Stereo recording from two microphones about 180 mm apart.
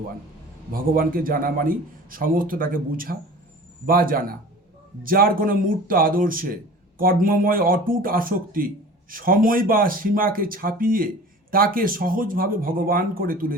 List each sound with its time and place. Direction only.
0.7 s a man's voice: 50° right (ahead or behind)